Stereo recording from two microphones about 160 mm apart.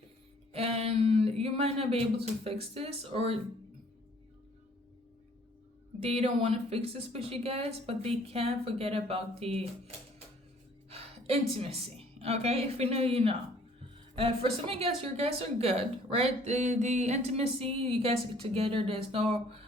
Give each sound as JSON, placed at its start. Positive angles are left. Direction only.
{"t": 0.5, "sound": "speech", "side_deg": -40}
{"t": 6.0, "sound": "speech", "side_deg": -40}
{"t": 10.8, "sound": "music", "side_deg": -40}
{"t": 11.5, "sound": "speech", "side_deg": -40}